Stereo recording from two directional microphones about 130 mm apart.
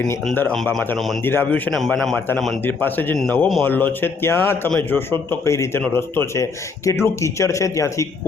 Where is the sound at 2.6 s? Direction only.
15° left (ahead or behind).